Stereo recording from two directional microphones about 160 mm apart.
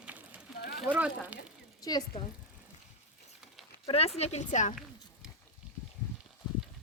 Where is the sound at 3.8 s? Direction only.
40° left (ahead or behind).